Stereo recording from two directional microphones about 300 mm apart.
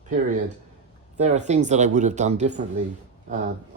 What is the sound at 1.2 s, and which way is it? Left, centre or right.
Speech, right.